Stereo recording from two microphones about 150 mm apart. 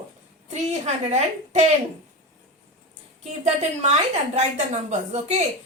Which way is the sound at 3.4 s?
50° right (ahead or behind).